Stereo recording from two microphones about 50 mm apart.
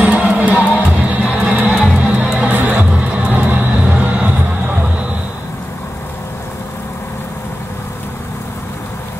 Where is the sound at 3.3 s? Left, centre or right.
Right.